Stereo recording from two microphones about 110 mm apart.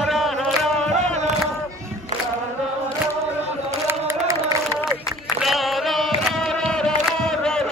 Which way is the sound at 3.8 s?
20° right (ahead or behind).